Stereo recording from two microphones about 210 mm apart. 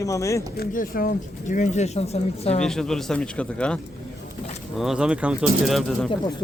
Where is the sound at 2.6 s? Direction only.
Centre (ahead or behind).